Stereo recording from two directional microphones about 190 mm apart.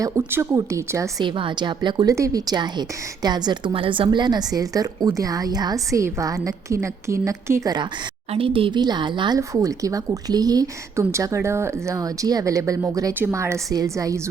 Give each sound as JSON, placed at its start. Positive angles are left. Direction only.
{"t": 0.0, "sound": "a woman's voice", "side_deg": -15}